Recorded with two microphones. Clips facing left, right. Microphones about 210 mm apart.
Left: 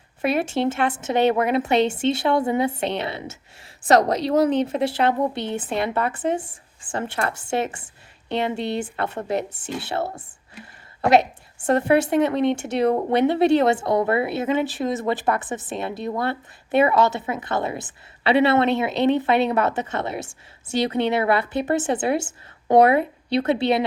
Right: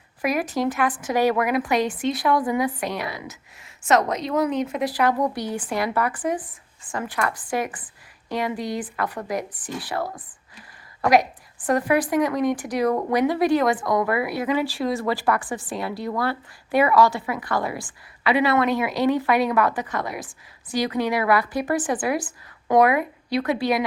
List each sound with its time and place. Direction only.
0.2 s speech: 25° left (ahead or behind)